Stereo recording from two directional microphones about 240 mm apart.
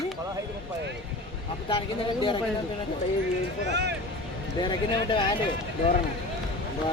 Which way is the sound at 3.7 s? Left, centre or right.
Right.